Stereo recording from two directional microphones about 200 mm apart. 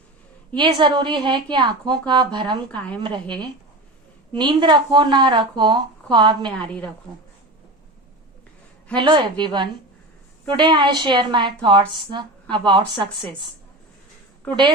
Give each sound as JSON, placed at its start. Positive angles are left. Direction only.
{"t": 0.5, "sound": "speech", "side_deg": -25}
{"t": 2.7, "sound": "a woman's voice", "side_deg": 5}
{"t": 3.0, "sound": "speech", "side_deg": -25}
{"t": 4.4, "sound": "speech", "side_deg": -25}
{"t": 6.6, "sound": "a woman's voice", "side_deg": 5}
{"t": 9.0, "sound": "speech", "side_deg": -20}
{"t": 14.4, "sound": "a woman's voice", "side_deg": 5}